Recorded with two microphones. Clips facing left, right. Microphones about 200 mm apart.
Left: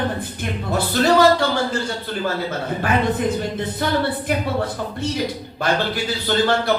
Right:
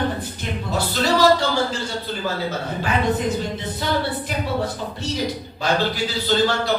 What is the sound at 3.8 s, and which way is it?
Speech, 55° left (ahead or behind).